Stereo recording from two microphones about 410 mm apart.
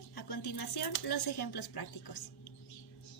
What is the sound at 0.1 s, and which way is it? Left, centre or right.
A woman's voice, left.